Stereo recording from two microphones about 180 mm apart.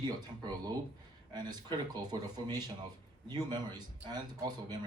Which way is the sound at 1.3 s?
20° right (ahead or behind).